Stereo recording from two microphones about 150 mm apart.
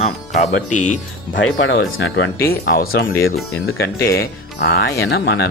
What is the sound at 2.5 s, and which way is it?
Speech, 90° left.